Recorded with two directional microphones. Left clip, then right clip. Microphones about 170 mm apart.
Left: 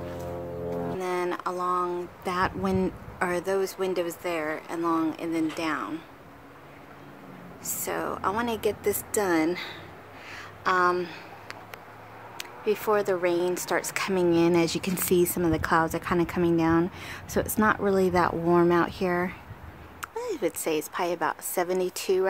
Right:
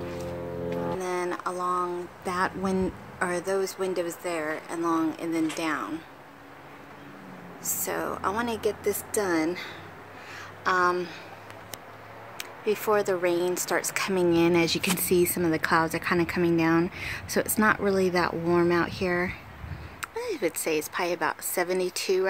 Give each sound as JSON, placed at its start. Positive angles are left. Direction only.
{"t": 0.9, "sound": "speech", "side_deg": 15}
{"t": 7.6, "sound": "speech", "side_deg": 10}
{"t": 10.3, "sound": "a sound", "side_deg": 10}
{"t": 12.4, "sound": "speech", "side_deg": 5}